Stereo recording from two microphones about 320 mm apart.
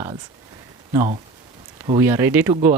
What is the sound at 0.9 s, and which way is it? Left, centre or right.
Speech, centre.